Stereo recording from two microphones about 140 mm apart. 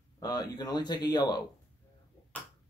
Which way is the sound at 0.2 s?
30° left (ahead or behind).